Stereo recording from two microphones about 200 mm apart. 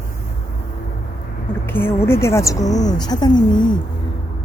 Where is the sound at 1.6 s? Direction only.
10° left (ahead or behind).